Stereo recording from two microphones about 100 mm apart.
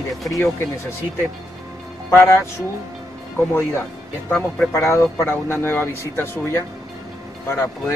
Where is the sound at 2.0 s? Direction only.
25° left (ahead or behind).